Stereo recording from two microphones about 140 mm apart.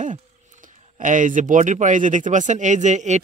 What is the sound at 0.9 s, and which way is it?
Speech, 65° right (ahead or behind).